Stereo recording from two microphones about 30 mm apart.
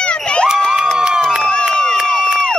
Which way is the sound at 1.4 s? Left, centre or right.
Left.